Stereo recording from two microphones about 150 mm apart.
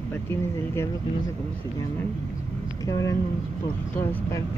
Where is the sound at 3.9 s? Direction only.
10° left (ahead or behind).